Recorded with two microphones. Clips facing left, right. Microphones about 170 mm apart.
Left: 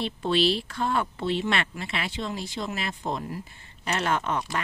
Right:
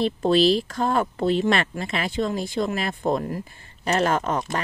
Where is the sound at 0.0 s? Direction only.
40° right (ahead or behind).